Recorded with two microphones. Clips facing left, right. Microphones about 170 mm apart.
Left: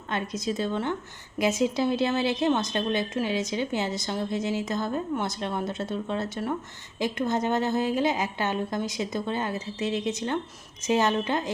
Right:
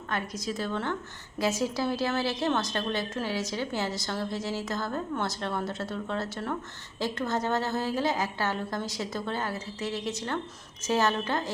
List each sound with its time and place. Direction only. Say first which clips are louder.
0.1 s a woman's voice: left 4 dB; 25° left (ahead or behind)